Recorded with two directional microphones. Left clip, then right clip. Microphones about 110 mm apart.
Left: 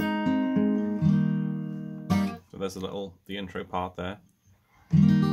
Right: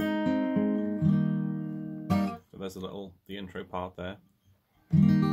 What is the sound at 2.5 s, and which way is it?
Speech, centre (ahead or behind).